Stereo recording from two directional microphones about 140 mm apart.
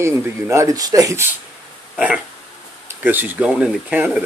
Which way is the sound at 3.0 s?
15° right (ahead or behind).